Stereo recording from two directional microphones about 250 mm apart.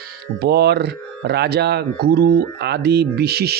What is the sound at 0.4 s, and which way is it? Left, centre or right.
Speech, right.